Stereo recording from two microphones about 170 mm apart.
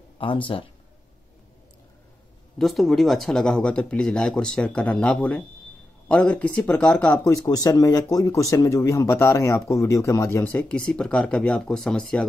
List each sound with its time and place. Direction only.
0.2 s speech: 30° left (ahead or behind)
2.6 s speech: centre (ahead or behind)
7.2 s speech: 20° left (ahead or behind); by 12.3 s 5° left (ahead or behind)